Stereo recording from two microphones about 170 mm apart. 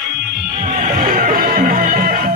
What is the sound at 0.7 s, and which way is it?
Music, 50° right (ahead or behind).